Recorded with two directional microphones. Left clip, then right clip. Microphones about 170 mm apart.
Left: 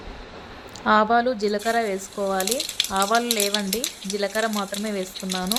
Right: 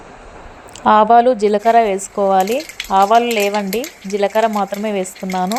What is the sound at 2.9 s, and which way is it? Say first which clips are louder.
Speech: right 12 dB; 25° right (ahead or behind).